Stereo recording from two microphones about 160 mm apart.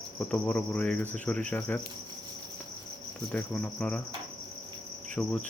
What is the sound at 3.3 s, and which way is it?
Speech, 5° left (ahead or behind).